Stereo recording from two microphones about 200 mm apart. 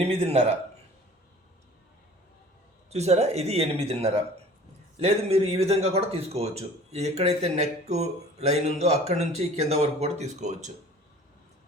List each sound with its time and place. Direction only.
0.0 s a man's voice: 30° right (ahead or behind)
2.9 s speech: 35° right (ahead or behind)